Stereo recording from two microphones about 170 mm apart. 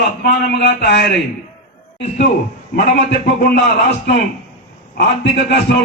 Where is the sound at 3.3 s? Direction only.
80° left.